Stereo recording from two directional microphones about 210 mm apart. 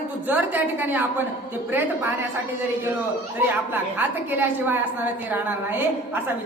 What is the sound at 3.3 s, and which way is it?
A woman's voice, 10° right (ahead or behind).